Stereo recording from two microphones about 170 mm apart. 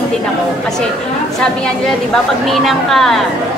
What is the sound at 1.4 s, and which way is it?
A woman's voice, 5° left (ahead or behind).